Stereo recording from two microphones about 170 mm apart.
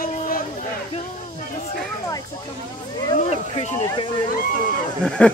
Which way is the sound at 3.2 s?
40° left (ahead or behind).